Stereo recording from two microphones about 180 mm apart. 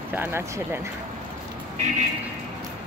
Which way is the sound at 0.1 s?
10° right (ahead or behind).